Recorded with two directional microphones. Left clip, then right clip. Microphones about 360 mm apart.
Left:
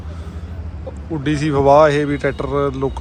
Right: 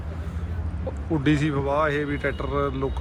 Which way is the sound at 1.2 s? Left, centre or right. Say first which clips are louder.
Left 9 dB; centre.